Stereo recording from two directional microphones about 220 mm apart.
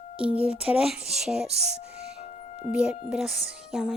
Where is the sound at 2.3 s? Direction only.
30° left (ahead or behind).